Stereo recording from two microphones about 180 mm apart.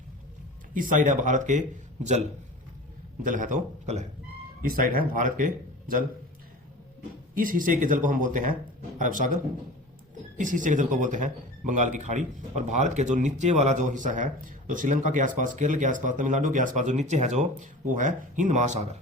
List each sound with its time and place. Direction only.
0.7 s speech: 45° right (ahead or behind)
3.2 s speech: 45° right (ahead or behind)
4.6 s speech: 50° right (ahead or behind)
7.3 s speech: 50° right (ahead or behind)
10.3 s speech: 45° right (ahead or behind)